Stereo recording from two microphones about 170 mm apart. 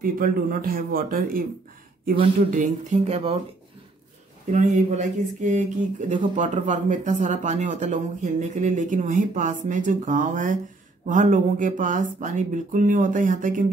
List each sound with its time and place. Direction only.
0.0 s speech: 55° right (ahead or behind)
2.5 s speech: 45° right (ahead or behind)
4.5 s speech: 45° right (ahead or behind)